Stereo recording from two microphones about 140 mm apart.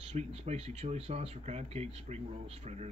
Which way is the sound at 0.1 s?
50° right (ahead or behind).